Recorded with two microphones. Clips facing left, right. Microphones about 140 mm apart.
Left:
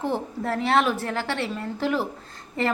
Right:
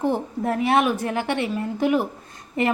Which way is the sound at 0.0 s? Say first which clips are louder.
Right 4 dB; 15° right (ahead or behind).